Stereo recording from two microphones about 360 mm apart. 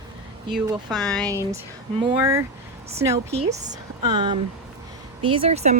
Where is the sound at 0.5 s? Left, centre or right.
Centre.